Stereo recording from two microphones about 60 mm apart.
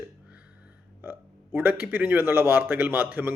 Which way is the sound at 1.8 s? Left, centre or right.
Right.